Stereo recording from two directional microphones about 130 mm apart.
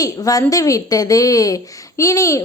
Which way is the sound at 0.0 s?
25° left (ahead or behind).